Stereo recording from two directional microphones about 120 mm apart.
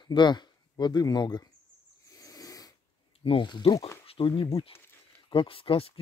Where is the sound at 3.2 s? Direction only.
40° left (ahead or behind).